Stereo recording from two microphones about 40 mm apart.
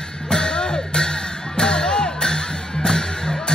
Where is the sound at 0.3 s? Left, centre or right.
Centre.